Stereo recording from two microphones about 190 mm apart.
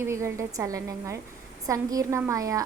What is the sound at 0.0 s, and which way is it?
A woman's voice, 15° right (ahead or behind).